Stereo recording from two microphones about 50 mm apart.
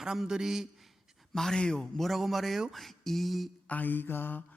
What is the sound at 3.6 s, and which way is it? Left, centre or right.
Mantra, left.